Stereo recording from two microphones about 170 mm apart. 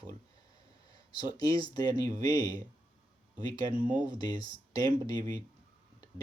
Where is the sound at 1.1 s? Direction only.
25° left (ahead or behind).